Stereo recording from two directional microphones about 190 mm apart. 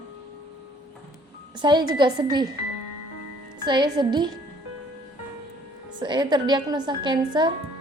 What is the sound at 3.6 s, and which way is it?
Speech, 25° right (ahead or behind).